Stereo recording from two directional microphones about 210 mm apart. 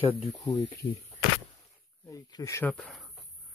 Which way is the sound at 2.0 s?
15° left (ahead or behind).